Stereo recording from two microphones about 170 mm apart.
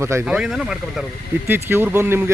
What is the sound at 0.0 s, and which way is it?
Speech, 15° right (ahead or behind).